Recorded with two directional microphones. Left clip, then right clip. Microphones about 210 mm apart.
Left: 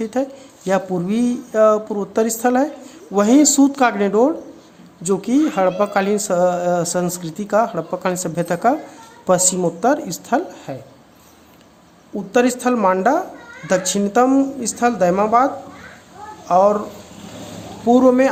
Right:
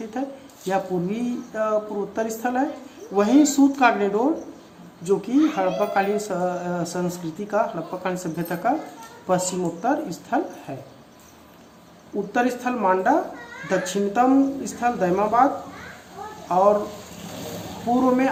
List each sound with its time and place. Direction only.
0.1 s a woman's voice: 55° left (ahead or behind)
12.3 s speech: 55° left (ahead or behind)
16.5 s a woman's voice: 55° left (ahead or behind)